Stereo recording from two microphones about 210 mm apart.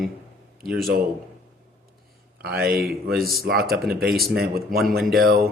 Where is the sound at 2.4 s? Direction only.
45° right (ahead or behind).